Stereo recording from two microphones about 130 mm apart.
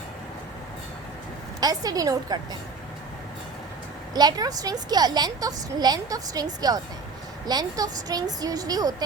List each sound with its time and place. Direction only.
1.6 s a woman's voice: 30° right (ahead or behind)
4.1 s a woman's voice: 30° right (ahead or behind)